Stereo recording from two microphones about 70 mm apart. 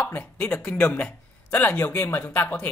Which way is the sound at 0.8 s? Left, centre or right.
Centre.